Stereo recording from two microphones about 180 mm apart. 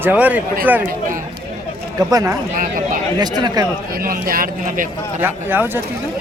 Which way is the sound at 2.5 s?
50° right (ahead or behind).